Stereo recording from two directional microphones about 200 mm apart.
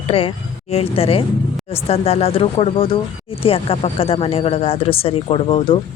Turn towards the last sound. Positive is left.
turn(degrees=30)  # may be behind; listen again after turning